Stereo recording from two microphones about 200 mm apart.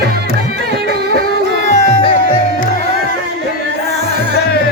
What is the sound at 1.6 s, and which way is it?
Music, 35° left (ahead or behind).